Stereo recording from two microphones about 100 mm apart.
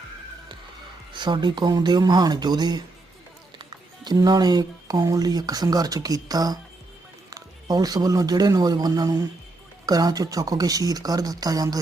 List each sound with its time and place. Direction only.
1.1 s a man's voice: 50° right (ahead or behind)